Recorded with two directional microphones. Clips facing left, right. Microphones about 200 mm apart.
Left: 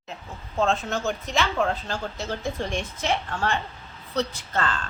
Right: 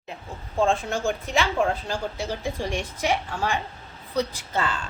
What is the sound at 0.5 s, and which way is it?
A woman's voice, 10° right (ahead or behind).